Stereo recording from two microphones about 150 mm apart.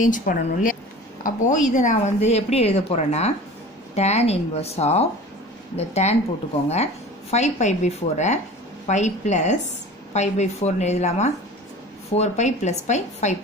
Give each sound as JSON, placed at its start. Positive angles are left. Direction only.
{"t": 0.0, "sound": "a woman's voice", "side_deg": 60}